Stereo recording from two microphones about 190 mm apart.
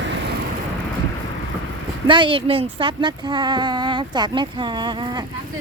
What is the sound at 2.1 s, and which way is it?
Speech, 25° right (ahead or behind).